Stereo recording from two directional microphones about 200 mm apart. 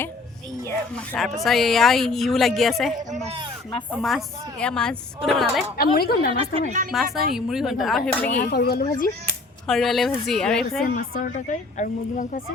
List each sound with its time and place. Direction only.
0.9 s a woman's voice: centre (ahead or behind)
3.1 s speech: 35° right (ahead or behind)
3.9 s a woman's voice: centre (ahead or behind)
5.7 s speech: 50° left (ahead or behind)
6.3 s a woman's voice: 25° right (ahead or behind)
6.9 s a woman's voice: centre (ahead or behind)
8.3 s speech: 45° left (ahead or behind)
9.6 s a woman's voice: centre (ahead or behind)
10.8 s speech: 45° left (ahead or behind)